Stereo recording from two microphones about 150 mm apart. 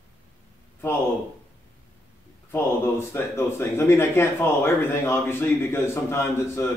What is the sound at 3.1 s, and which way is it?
Speech, 15° left (ahead or behind).